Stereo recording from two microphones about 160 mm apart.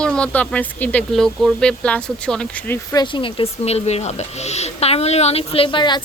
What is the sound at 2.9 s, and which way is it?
Speech, 30° left (ahead or behind).